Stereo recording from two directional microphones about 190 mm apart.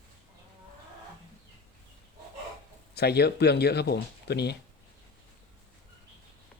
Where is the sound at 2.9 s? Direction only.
55° left (ahead or behind).